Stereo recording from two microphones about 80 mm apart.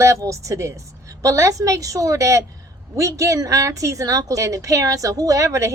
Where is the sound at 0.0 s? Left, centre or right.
Right.